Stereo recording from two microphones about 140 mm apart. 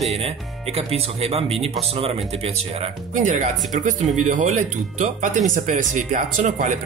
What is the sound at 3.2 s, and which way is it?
Speech, 65° right (ahead or behind).